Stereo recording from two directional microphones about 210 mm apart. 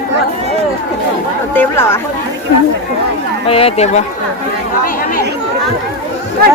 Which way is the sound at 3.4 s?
25° left (ahead or behind).